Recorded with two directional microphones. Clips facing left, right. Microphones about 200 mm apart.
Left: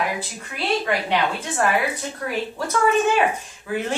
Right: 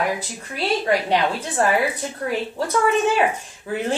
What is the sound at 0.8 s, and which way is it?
Speech, 35° right (ahead or behind).